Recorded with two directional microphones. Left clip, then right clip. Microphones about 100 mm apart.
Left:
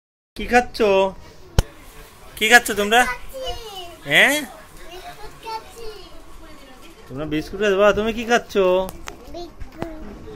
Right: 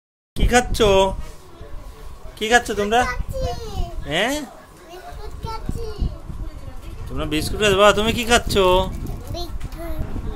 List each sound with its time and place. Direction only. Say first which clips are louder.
0.4 s speech: even; 25° right (ahead or behind)
2.3 s a man's voice: left 3 dB; 5° left (ahead or behind)
4.1 s a man's voice: left 6 dB; centre (ahead or behind)
7.2 s speech: right 1 dB; 20° right (ahead or behind)